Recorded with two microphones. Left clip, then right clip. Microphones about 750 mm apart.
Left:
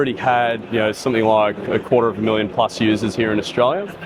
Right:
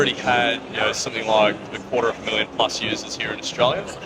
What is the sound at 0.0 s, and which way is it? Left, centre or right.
Speech, left.